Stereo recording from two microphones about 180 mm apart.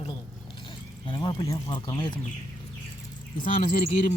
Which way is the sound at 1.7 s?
25° left (ahead or behind).